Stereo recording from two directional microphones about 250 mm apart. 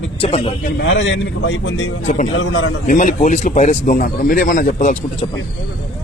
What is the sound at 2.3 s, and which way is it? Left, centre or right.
Speech, left.